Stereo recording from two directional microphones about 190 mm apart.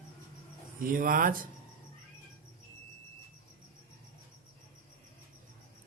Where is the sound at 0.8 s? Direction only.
45° right (ahead or behind).